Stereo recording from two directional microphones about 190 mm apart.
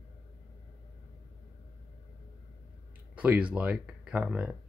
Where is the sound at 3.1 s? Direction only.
5° right (ahead or behind).